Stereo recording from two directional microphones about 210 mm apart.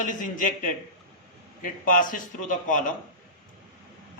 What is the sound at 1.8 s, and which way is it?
A man's voice, 40° left (ahead or behind).